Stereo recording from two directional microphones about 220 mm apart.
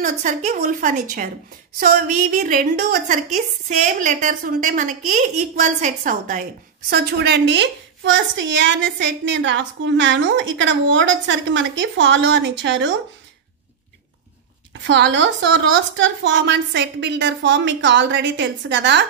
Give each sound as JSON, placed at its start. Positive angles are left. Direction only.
{"t": 0.0, "sound": "a woman's voice", "side_deg": -35}
{"t": 6.9, "sound": "a woman's voice", "side_deg": -50}
{"t": 14.7, "sound": "speech", "side_deg": -55}